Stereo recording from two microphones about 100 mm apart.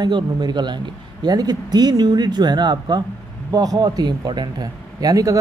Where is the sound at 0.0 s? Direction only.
45° right (ahead or behind).